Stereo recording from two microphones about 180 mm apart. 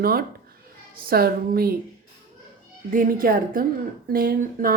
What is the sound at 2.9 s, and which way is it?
Speech, 50° right (ahead or behind).